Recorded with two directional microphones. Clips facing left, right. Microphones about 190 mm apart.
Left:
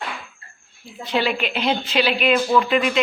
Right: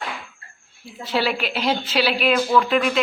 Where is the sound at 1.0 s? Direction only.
5° right (ahead or behind).